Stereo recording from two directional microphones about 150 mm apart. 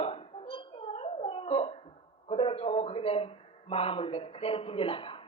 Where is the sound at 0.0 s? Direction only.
40° left (ahead or behind).